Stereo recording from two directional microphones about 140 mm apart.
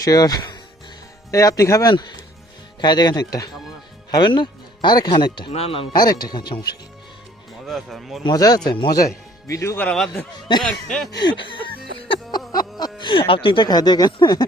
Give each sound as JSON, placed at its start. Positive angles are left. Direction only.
{"t": 0.0, "sound": "speech", "side_deg": 25}
{"t": 7.7, "sound": "speech", "side_deg": 0}
{"t": 8.2, "sound": "speech", "side_deg": 25}
{"t": 9.5, "sound": "speech", "side_deg": 25}
{"t": 9.7, "sound": "speech", "side_deg": 5}
{"t": 11.1, "sound": "speech", "side_deg": 35}
{"t": 11.9, "sound": "music", "side_deg": 40}
{"t": 12.5, "sound": "speech", "side_deg": 30}